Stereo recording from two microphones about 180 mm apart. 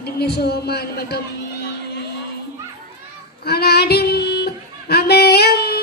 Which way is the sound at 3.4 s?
60° left (ahead or behind).